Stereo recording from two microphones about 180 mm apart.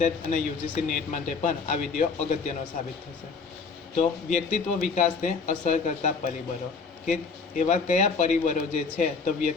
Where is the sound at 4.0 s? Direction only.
45° left (ahead or behind).